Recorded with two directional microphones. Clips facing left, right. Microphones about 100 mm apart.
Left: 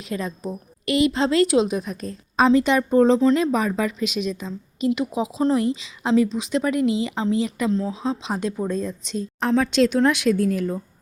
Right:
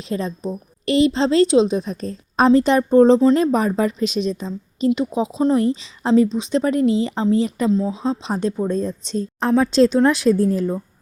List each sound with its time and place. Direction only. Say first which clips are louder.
0.0 s a woman's voice: right 4 dB; 30° right (ahead or behind)
7.7 s speech: right 4 dB; 15° right (ahead or behind)
8.2 s speech: right 4 dB; 35° right (ahead or behind)